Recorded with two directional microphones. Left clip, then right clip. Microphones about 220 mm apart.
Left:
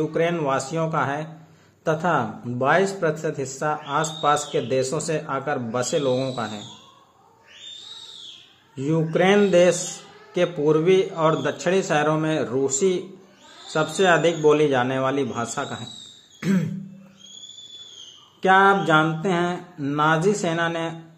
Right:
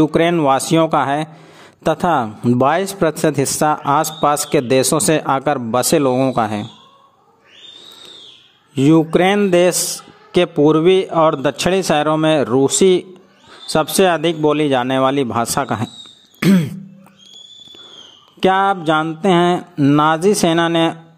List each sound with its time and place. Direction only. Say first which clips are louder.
0.0 s speech: right 9 dB; 50° right (ahead or behind)
8.7 s speech: right 10 dB; 50° right (ahead or behind)
16.3 s a sound: right 10 dB; 45° right (ahead or behind)
18.4 s speech: right 2 dB; 50° right (ahead or behind)